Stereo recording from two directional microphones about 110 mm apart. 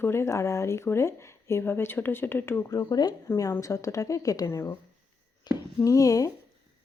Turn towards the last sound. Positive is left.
turn(degrees=30)  # may be behind; listen again after turning